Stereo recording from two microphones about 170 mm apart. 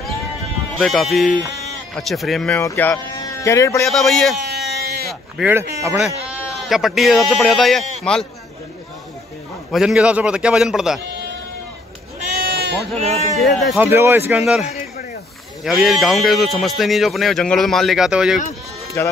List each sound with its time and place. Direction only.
0.7 s speech: centre (ahead or behind)
2.6 s speech: 15° left (ahead or behind)
3.2 s a sound: 20° left (ahead or behind)
3.8 s speech: centre (ahead or behind)
4.5 s a sound: 65° right (ahead or behind)
5.4 s speech: 15° right (ahead or behind)
5.9 s a man's voice: centre (ahead or behind)
9.7 s speech: centre (ahead or behind)
12.9 s a man's voice: 40° right (ahead or behind)
13.4 s speech: centre (ahead or behind)
13.7 s speech: 15° right (ahead or behind)
14.4 s speech: centre (ahead or behind)
19.0 s speech: 15° left (ahead or behind)